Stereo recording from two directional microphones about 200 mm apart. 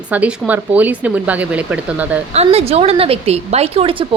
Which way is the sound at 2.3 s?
30° right (ahead or behind).